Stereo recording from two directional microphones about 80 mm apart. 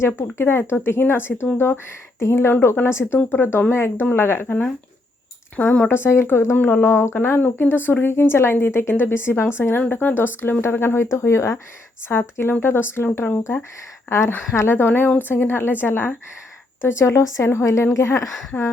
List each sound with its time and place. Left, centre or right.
0.0 s a woman's voice: left
5.5 s speech: centre
5.9 s a woman's voice: left